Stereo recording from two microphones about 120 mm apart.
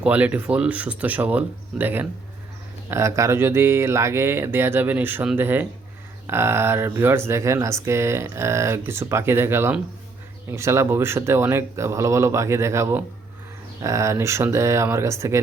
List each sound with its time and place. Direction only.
0.0 s speech: 10° right (ahead or behind)